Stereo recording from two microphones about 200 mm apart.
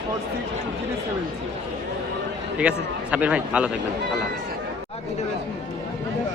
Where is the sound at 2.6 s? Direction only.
5° right (ahead or behind).